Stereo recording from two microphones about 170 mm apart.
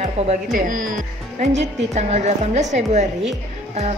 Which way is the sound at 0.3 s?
50° right (ahead or behind).